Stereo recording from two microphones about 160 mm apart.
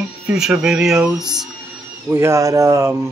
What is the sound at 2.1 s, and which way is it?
Speech, 20° right (ahead or behind).